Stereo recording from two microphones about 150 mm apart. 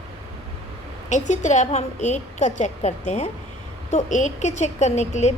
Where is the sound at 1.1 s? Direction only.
55° left (ahead or behind).